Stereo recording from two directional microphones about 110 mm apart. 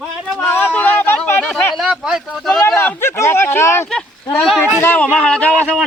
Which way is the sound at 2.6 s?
20° left (ahead or behind).